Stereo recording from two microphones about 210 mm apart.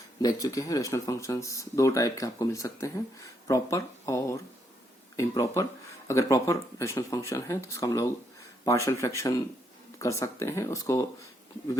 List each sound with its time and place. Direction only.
0.2 s speech: 15° left (ahead or behind)